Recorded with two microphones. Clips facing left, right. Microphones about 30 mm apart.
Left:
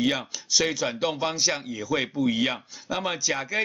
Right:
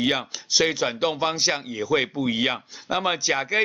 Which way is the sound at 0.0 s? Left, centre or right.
Centre.